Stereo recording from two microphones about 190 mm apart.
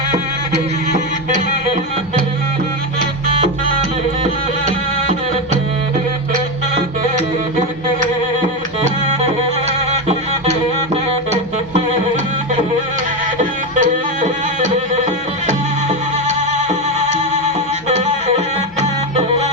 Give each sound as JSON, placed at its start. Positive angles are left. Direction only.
{"t": 0.5, "sound": "music", "side_deg": -40}
{"t": 3.4, "sound": "music", "side_deg": -40}
{"t": 9.6, "sound": "music", "side_deg": -35}
{"t": 13.4, "sound": "music", "side_deg": -40}